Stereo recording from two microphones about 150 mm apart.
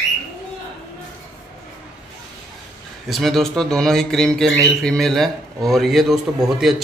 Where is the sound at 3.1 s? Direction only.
Centre (ahead or behind).